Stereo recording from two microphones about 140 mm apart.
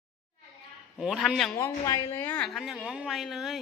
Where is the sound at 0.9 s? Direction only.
5° right (ahead or behind).